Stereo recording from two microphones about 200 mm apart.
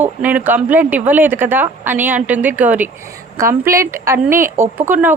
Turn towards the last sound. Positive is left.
turn(degrees=-10)  # may be behind; listen again after turning